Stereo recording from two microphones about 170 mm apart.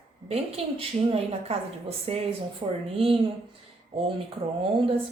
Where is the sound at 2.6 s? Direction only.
35° right (ahead or behind).